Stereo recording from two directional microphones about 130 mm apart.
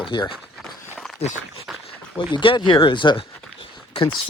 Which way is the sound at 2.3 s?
40° left (ahead or behind).